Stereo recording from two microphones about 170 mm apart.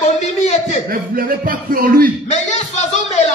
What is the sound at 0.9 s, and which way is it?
A man's voice, 55° right (ahead or behind).